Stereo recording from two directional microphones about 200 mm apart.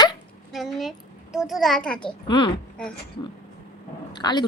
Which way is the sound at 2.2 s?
25° left (ahead or behind).